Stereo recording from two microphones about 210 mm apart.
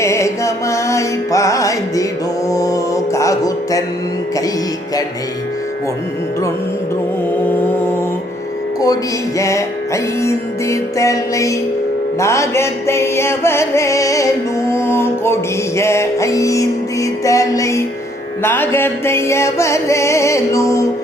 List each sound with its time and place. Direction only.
0.0 s music: 15° left (ahead or behind)
9.4 s music: 15° left (ahead or behind)